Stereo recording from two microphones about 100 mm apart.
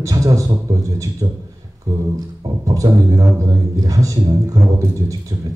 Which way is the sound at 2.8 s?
55° right (ahead or behind).